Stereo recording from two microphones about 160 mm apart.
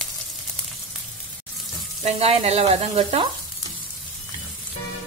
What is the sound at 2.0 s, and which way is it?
A woman's voice, 40° right (ahead or behind).